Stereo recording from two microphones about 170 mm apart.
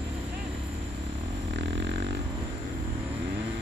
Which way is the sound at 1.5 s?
90° right.